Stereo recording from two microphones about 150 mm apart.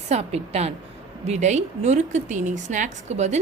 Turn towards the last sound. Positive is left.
turn(degrees=-50)  # may be behind; listen again after turning